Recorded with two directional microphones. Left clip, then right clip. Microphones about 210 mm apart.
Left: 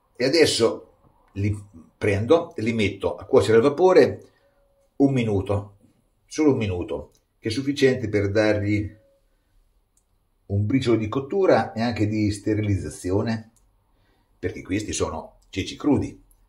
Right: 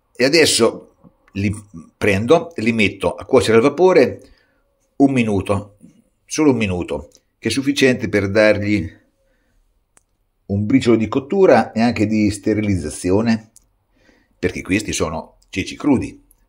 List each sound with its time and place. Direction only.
0.1 s speech: 45° right (ahead or behind)
1.2 s a sound: 45° right (ahead or behind)
2.0 s speech: 45° right (ahead or behind)
4.9 s speech: 40° right (ahead or behind)
10.4 s speech: 50° right (ahead or behind)